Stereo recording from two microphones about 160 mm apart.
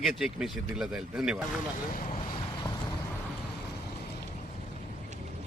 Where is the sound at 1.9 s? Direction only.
60° left (ahead or behind).